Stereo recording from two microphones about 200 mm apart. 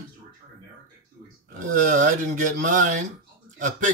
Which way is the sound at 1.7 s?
40° right (ahead or behind).